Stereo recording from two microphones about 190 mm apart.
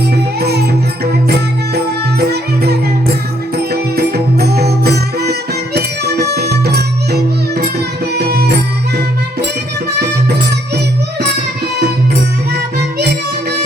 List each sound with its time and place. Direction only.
0.3 s music: 55° right (ahead or behind)